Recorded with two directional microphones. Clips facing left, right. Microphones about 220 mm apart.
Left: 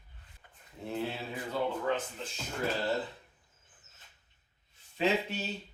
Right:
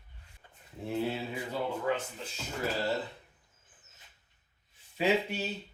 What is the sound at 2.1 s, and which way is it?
Speech, 5° right (ahead or behind).